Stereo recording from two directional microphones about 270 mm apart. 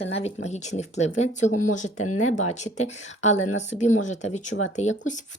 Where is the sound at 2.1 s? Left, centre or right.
Left.